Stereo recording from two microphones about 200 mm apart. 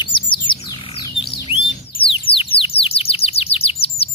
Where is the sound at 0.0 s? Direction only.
25° left (ahead or behind).